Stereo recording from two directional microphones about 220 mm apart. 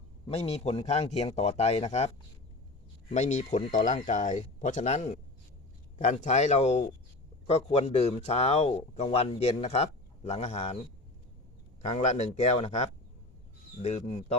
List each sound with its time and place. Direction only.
0.3 s speech: 30° left (ahead or behind)
11.9 s speech: 30° left (ahead or behind)